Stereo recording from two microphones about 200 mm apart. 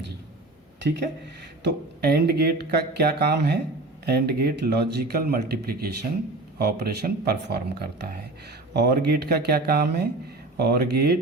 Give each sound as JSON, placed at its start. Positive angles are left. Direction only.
{"t": 0.8, "sound": "speech", "side_deg": -60}